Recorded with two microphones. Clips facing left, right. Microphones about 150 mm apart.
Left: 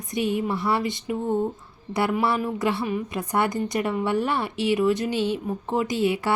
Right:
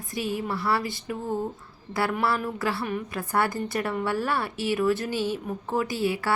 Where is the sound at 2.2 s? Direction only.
15° left (ahead or behind).